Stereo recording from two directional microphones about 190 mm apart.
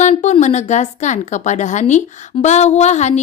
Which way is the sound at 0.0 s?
40° left (ahead or behind).